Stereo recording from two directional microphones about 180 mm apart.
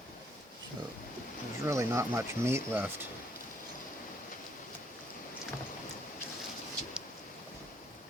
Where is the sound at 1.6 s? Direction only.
15° right (ahead or behind).